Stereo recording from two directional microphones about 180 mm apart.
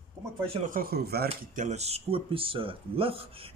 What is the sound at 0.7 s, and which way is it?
Speech, 55° right (ahead or behind).